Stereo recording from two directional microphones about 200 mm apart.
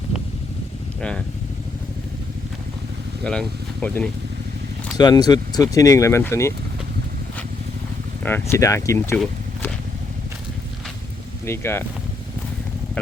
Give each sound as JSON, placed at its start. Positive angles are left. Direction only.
{"t": 3.2, "sound": "speech", "side_deg": 5}
{"t": 4.9, "sound": "speech", "side_deg": 20}
{"t": 8.2, "sound": "speech", "side_deg": 10}
{"t": 11.4, "sound": "speech", "side_deg": 10}